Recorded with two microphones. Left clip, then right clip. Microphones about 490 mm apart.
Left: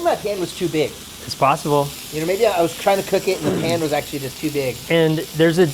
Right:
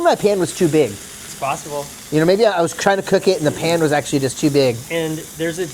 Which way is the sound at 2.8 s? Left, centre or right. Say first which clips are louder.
Right 5 dB; right.